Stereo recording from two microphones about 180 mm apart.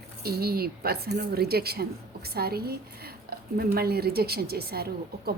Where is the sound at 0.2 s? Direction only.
60° right (ahead or behind).